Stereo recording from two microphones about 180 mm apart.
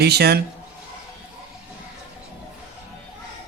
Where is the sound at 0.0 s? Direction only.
65° right (ahead or behind).